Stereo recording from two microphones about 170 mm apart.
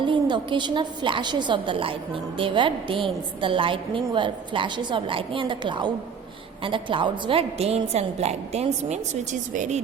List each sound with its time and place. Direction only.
0.0 s a woman's voice: 30° right (ahead or behind); by 9.8 s 45° right (ahead or behind)